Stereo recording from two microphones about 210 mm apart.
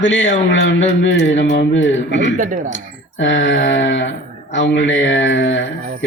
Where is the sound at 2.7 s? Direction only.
60° left (ahead or behind).